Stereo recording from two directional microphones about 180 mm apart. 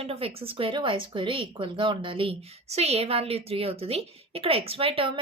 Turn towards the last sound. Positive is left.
turn(degrees=-30)  # may be behind; listen again after turning